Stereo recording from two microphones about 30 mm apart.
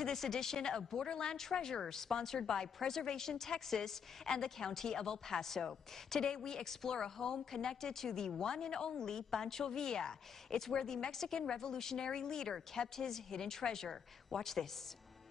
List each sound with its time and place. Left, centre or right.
0.0 s a woman's voice: centre
6.2 s a woman's voice: left